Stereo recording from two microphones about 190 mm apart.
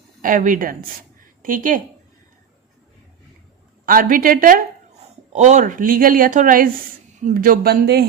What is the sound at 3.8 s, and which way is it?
A woman's voice, 50° right (ahead or behind).